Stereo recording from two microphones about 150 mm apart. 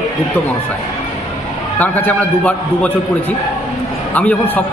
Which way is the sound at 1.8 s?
10° left (ahead or behind).